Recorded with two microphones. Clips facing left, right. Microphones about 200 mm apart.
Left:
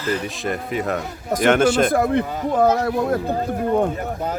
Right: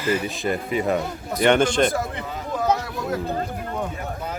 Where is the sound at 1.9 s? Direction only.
55° left (ahead or behind).